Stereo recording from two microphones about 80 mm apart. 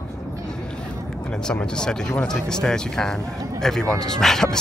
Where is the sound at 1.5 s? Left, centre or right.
Centre.